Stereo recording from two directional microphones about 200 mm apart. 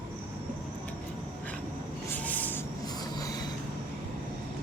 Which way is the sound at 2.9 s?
20° left (ahead or behind).